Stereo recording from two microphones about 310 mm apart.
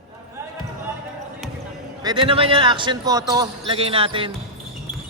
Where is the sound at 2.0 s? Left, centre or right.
Centre.